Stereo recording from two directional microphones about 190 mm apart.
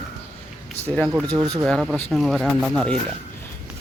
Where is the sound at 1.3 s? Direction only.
20° right (ahead or behind).